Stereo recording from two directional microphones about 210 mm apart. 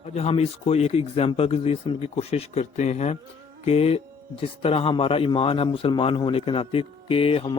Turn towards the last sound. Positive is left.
turn(degrees=25)  # may be behind; listen again after turning